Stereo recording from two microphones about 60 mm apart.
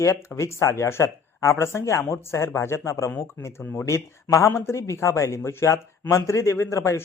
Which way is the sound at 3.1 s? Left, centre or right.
Left.